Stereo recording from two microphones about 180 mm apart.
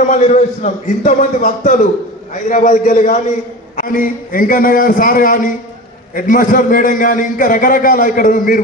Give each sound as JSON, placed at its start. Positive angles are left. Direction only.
{"t": 0.0, "sound": "a man's voice", "side_deg": 45}